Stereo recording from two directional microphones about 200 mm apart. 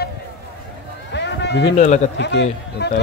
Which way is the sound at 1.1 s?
60° left (ahead or behind).